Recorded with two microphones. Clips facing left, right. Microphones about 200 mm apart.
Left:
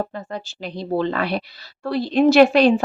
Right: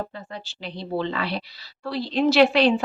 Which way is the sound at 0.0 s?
45° left (ahead or behind).